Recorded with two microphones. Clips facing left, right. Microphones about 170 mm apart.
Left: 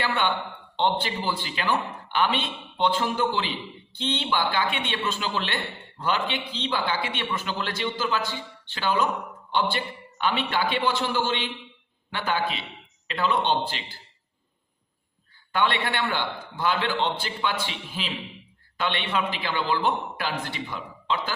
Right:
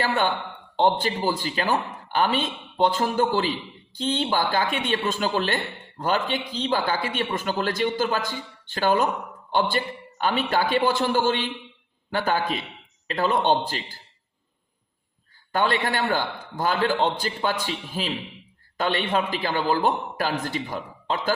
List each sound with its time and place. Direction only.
0.0 s a man's voice: 40° right (ahead or behind)
15.5 s a man's voice: 40° right (ahead or behind)